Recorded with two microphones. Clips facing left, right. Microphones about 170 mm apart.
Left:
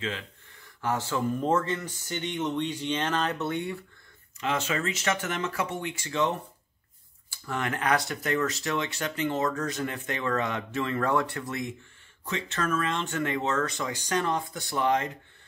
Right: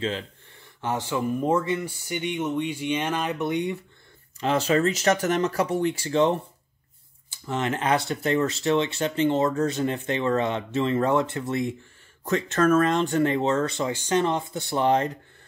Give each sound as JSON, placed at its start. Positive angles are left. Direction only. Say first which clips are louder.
{"t": 0.7, "sound": "speech", "louder": "right 2 dB", "side_deg": -20}
{"t": 4.4, "sound": "speech", "louder": "right 7 dB", "side_deg": -35}
{"t": 12.3, "sound": "speech", "louder": "right 9 dB", "side_deg": -45}